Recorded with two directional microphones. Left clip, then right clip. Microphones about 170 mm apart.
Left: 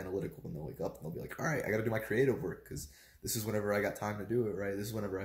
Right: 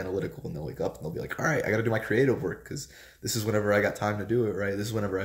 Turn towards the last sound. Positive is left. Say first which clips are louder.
# right 8 dB
turn(degrees=-20)  # may be behind; listen again after turning